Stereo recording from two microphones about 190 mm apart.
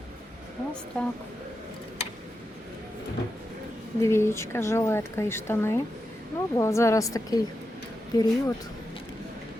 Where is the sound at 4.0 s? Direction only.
15° left (ahead or behind).